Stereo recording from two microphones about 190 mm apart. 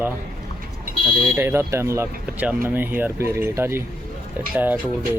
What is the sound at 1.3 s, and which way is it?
Speech, 15° right (ahead or behind).